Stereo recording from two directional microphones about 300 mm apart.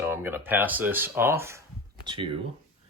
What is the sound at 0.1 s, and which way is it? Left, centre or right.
Speech, centre.